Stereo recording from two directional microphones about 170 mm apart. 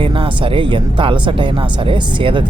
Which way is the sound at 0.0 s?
30° right (ahead or behind).